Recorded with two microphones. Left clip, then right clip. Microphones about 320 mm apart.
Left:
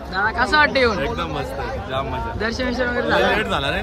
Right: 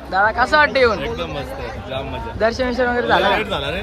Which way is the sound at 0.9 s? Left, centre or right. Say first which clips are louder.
Left 1 dB; left.